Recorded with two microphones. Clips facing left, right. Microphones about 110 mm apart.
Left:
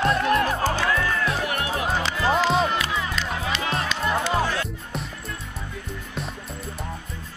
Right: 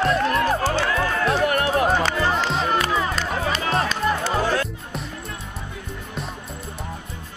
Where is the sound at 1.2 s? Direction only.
40° right (ahead or behind).